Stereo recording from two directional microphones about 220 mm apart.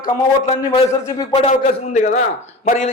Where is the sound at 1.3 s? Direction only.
30° left (ahead or behind).